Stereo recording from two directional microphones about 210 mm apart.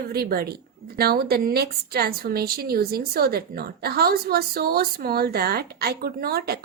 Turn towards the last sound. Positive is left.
turn(degrees=-50)  # may be behind; listen again after turning